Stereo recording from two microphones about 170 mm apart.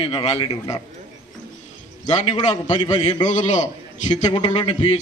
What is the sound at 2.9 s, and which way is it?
A man's voice, 45° left (ahead or behind).